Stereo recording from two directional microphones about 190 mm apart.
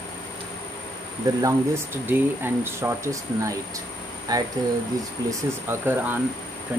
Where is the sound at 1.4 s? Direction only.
15° right (ahead or behind).